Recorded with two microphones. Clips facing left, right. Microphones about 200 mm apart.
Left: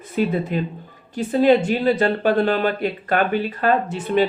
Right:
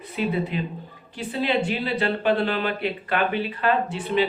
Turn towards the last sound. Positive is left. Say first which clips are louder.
# left 4 dB
turn(degrees=45)  # may be behind; listen again after turning